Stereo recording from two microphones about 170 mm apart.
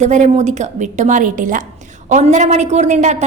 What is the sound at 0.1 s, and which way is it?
A woman's voice, 45° right (ahead or behind).